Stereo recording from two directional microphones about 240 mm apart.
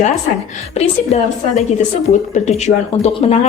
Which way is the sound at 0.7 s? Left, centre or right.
Left.